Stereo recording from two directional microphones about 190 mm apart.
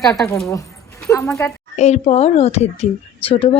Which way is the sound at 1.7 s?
35° left (ahead or behind).